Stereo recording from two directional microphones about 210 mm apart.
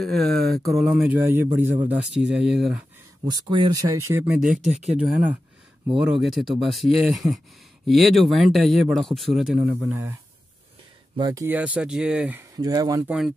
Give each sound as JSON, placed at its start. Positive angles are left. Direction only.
{"t": 0.0, "sound": "speech", "side_deg": 0}
{"t": 3.3, "sound": "speech", "side_deg": -20}
{"t": 4.1, "sound": "speech", "side_deg": -5}
{"t": 4.6, "sound": "speech", "side_deg": -35}
{"t": 4.9, "sound": "speech", "side_deg": -10}
{"t": 11.1, "sound": "speech", "side_deg": -15}
{"t": 13.0, "sound": "speech", "side_deg": 0}